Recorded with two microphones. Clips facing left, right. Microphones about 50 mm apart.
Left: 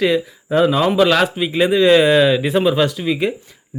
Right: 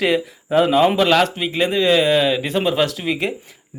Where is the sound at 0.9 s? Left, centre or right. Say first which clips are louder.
Left 2 dB; centre.